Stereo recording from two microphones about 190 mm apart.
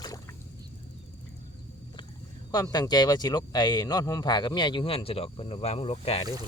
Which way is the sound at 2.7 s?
20° left (ahead or behind).